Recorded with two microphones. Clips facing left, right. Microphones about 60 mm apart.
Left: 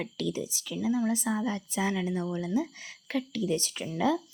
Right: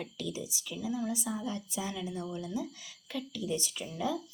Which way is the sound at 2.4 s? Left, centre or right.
Left.